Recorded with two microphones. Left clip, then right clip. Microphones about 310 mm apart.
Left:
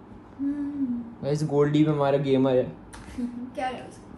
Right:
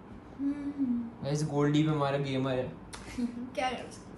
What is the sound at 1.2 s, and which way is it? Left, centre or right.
A man's voice, centre.